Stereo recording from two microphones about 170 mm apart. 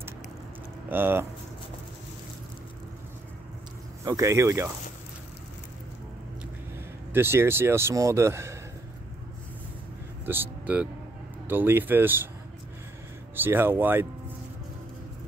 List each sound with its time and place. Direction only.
0.8 s speech: 10° right (ahead or behind)
4.0 s speech: 20° right (ahead or behind)
7.1 s speech: 15° right (ahead or behind)
10.2 s speech: 10° right (ahead or behind)
13.4 s speech: 10° right (ahead or behind)